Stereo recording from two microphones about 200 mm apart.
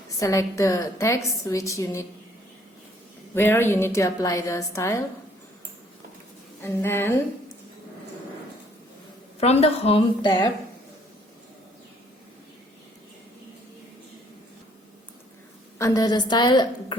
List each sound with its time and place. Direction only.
0.2 s a woman's voice: 15° left (ahead or behind)
3.3 s a woman's voice: 10° left (ahead or behind)
6.6 s a woman's voice: 10° left (ahead or behind)
9.4 s a woman's voice: 30° left (ahead or behind)
15.8 s a woman's voice: 20° left (ahead or behind)